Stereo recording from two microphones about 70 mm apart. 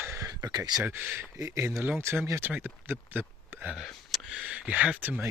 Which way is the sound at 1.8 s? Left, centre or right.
Right.